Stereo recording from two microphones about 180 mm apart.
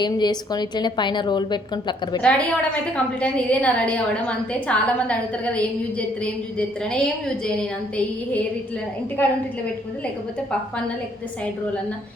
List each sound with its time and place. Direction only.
0.0 s a woman's voice: 25° left (ahead or behind)
2.2 s a woman's voice: 5° left (ahead or behind)